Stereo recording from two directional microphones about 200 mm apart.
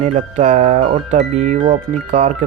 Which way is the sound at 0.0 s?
35° right (ahead or behind).